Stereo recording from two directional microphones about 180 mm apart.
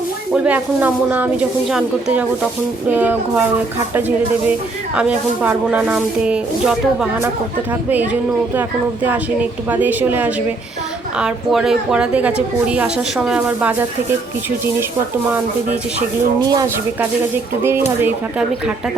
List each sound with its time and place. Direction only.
0.3 s speech: 10° right (ahead or behind)
9.0 s a woman's voice: 10° right (ahead or behind)
15.3 s speech: 5° right (ahead or behind)
16.4 s speech: 20° right (ahead or behind)